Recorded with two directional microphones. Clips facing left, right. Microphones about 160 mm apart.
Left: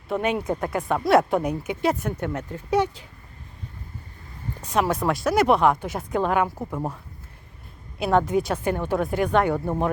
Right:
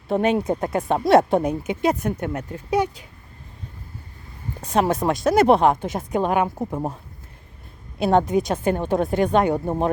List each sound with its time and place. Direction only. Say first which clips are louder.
0.1 s speech: right 4 dB; 30° right (ahead or behind); by 3.1 s 15° right (ahead or behind)
4.6 s speech: right 3 dB; 30° right (ahead or behind)